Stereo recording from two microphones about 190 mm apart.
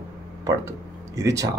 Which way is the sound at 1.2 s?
15° right (ahead or behind).